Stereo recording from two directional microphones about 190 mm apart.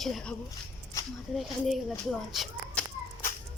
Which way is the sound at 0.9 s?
15° left (ahead or behind).